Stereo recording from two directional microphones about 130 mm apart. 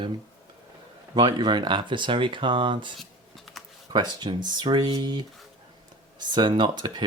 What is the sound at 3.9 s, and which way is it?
Speech, 35° right (ahead or behind).